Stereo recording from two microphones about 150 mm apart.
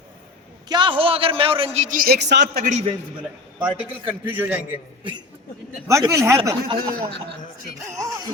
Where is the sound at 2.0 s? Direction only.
85° right.